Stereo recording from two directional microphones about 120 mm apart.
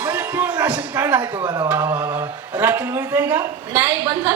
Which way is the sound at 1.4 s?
35° right (ahead or behind).